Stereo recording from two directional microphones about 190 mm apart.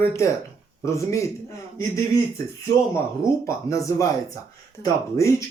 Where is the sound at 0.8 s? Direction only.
15° left (ahead or behind).